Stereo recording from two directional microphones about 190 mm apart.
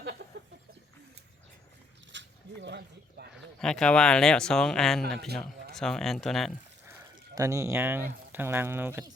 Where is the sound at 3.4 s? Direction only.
5° left (ahead or behind).